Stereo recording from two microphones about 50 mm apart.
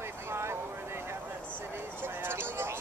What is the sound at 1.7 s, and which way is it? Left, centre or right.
Speech, right.